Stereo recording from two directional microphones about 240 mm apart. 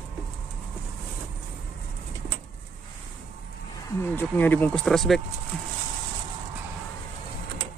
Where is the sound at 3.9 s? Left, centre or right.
Centre.